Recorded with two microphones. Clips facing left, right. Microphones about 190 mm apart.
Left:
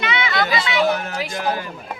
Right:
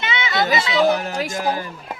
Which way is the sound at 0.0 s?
25° right (ahead or behind).